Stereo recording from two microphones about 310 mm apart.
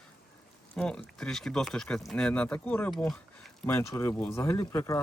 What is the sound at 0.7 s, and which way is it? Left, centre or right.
Speech, centre.